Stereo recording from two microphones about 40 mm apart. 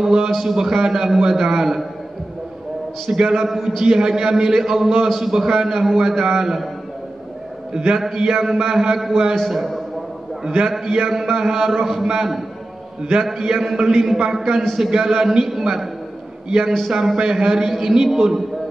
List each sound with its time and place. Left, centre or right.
0.0 s a man's voice: centre
3.1 s a man's voice: centre
7.7 s a man's voice: centre
8.0 s a man's voice: centre
10.9 s a man's voice: centre